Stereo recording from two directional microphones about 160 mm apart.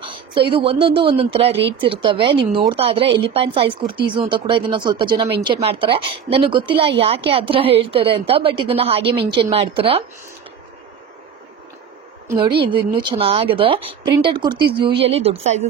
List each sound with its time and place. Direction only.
0.0 s a sound: 35° right (ahead or behind)
0.5 s speech: 35° right (ahead or behind)
12.4 s speech: 30° right (ahead or behind)